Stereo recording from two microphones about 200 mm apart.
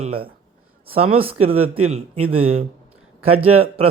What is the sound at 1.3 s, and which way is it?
Speech, 90° right.